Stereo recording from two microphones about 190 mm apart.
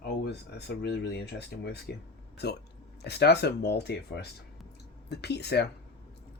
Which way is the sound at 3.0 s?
60° left (ahead or behind).